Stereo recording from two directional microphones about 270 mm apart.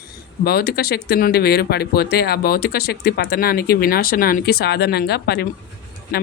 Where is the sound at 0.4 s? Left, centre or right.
Left.